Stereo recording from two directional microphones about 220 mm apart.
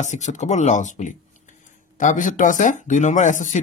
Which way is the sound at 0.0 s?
30° left (ahead or behind).